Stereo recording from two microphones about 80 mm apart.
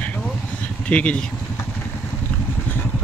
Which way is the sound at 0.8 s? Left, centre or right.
Centre.